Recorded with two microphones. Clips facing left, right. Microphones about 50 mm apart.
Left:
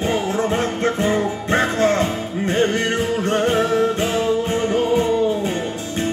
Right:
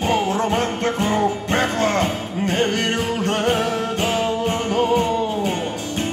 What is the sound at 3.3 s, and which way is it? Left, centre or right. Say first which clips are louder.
Music: left 2 dB; right.